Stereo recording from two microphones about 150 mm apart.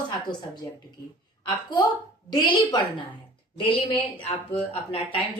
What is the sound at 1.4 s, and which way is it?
A woman's voice, 30° left (ahead or behind).